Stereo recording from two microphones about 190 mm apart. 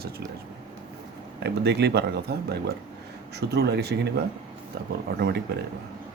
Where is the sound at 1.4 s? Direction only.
60° right (ahead or behind).